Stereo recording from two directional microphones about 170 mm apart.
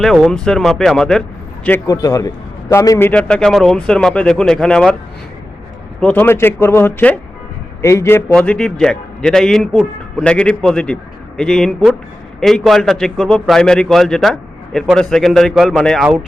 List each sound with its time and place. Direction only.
0.0 s a man's voice: centre (ahead or behind)
1.9 s a man's voice: 20° left (ahead or behind)
3.1 s a man's voice: 5° left (ahead or behind)
6.0 s a man's voice: 10° left (ahead or behind)